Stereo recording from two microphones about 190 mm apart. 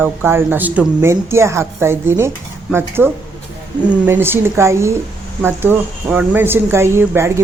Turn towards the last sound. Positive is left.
turn(degrees=-15)  # may be behind; listen again after turning